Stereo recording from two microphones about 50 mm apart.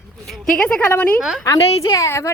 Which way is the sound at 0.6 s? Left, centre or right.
Left.